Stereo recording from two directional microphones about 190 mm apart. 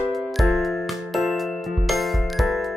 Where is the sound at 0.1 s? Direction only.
Centre (ahead or behind).